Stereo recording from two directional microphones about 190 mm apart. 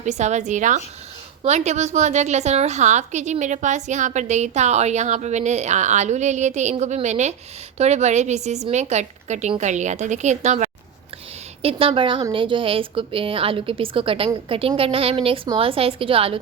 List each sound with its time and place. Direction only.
0.0 s a woman's voice: 40° right (ahead or behind)